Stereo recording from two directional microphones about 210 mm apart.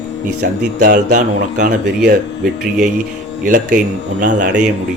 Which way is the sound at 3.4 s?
40° right (ahead or behind).